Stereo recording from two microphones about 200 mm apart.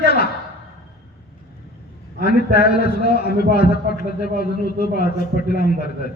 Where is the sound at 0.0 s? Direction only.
50° left (ahead or behind).